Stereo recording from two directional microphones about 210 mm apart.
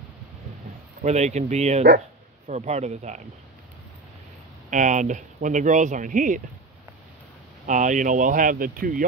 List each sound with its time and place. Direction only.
1.0 s speech: 35° right (ahead or behind)
4.6 s speech: 35° right (ahead or behind)
7.6 s speech: 35° right (ahead or behind)